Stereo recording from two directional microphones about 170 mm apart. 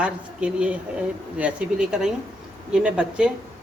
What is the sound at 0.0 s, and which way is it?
Speech, 5° right (ahead or behind).